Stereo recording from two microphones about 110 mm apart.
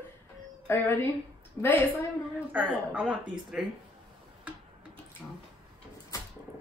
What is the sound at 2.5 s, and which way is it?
A woman's voice, 10° right (ahead or behind).